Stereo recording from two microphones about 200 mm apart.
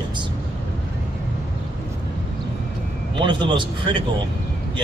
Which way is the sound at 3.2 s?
25° right (ahead or behind).